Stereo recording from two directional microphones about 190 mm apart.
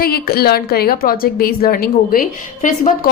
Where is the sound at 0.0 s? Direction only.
55° left (ahead or behind).